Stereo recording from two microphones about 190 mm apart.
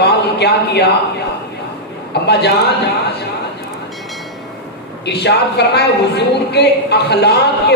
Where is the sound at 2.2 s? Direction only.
60° left (ahead or behind).